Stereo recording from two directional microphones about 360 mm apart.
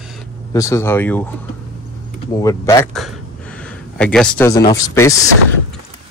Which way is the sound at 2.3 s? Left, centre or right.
Centre.